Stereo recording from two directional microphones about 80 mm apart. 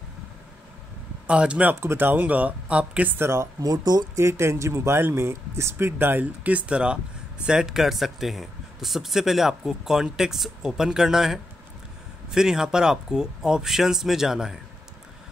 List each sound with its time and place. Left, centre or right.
1.2 s speech: centre
1.8 s speech: right
3.2 s speech: right
3.6 s speech: right
4.2 s speech: right; by 14.6 s centre